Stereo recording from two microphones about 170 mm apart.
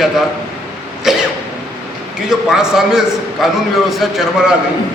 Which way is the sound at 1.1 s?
Centre (ahead or behind).